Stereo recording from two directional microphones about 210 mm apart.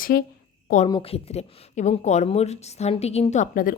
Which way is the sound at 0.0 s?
45° left (ahead or behind).